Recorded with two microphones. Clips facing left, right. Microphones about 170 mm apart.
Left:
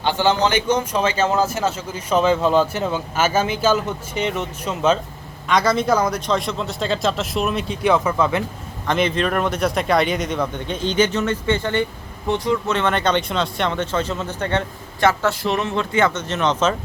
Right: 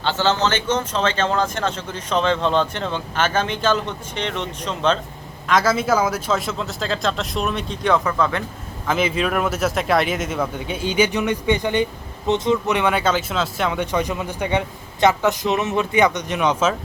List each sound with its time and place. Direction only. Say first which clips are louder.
0.0 s a man's voice: left 2 dB; 15° left (ahead or behind); by 16.7 s 10° right (ahead or behind)